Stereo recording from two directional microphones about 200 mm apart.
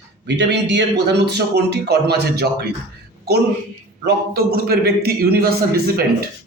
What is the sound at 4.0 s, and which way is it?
A man's voice, 50° right (ahead or behind).